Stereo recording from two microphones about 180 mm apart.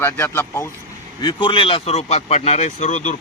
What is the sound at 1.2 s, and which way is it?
Speech, 25° left (ahead or behind).